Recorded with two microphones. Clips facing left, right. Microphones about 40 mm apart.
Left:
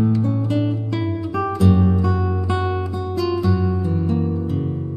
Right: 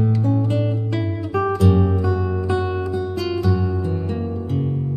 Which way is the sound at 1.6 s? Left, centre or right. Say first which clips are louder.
Left 4 dB; centre.